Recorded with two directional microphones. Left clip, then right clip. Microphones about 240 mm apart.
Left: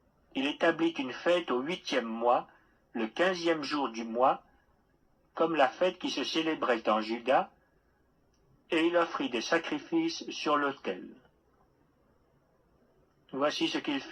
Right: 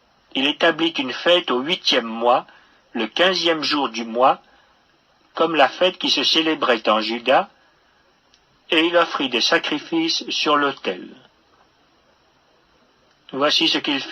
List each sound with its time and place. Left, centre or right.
0.3 s speech: right
8.7 s speech: right
13.2 s speech: right